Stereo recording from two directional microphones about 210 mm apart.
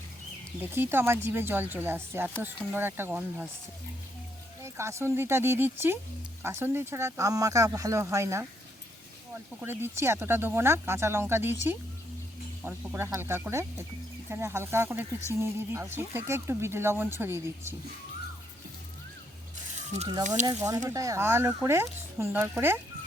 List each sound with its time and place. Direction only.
0.6 s speech: 10° right (ahead or behind)
4.6 s speech: 15° right (ahead or behind)
9.6 s speech: 10° right (ahead or behind)
12.6 s speech: 10° right (ahead or behind)
20.0 s speech: 20° right (ahead or behind)
20.2 s speech: 35° right (ahead or behind)
20.5 s speech: 15° right (ahead or behind)